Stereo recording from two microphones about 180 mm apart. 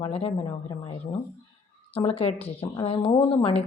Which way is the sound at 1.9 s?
35° left (ahead or behind).